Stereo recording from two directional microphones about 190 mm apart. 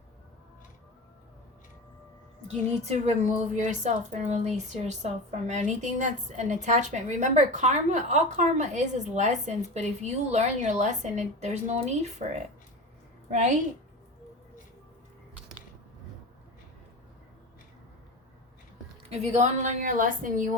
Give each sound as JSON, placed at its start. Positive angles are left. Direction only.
{"t": 2.8, "sound": "a woman's voice", "side_deg": -35}
{"t": 19.1, "sound": "a woman's voice", "side_deg": -35}